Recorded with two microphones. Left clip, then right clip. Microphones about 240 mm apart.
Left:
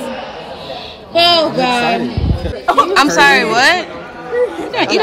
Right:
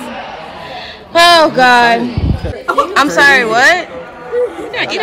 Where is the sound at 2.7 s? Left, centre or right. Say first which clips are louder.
Even; centre.